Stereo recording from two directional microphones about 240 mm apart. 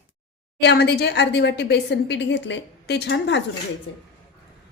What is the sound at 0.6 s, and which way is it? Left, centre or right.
A woman's voice, left.